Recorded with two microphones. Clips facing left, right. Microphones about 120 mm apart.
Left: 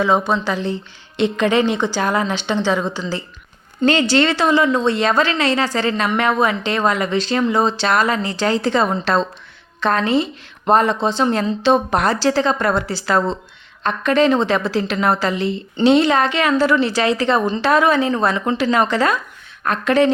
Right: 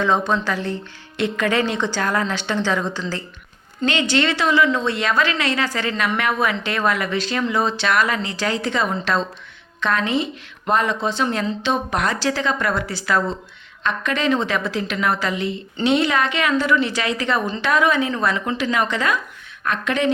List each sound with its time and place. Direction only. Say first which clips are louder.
0.0 s a woman's voice: left 2 dB; 10° left (ahead or behind)
3.8 s a woman's voice: left 5 dB; 35° left (ahead or behind)